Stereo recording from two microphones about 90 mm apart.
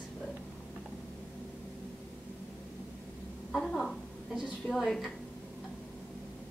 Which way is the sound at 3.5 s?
5° left (ahead or behind).